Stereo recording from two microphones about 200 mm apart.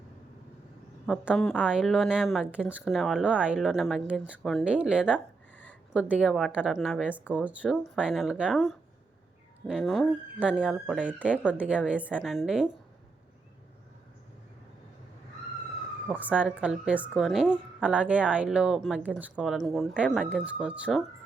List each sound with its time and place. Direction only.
1.0 s a woman's voice: centre (ahead or behind)
16.0 s a woman's voice: 5° right (ahead or behind)